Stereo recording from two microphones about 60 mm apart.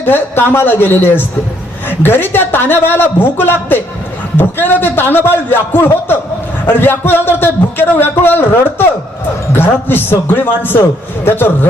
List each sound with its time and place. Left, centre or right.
0.0 s a man's voice: left